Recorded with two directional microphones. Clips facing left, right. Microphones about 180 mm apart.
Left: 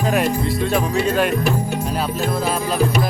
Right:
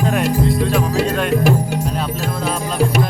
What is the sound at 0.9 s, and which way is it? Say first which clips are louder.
Speech: right 1 dB; 90° right.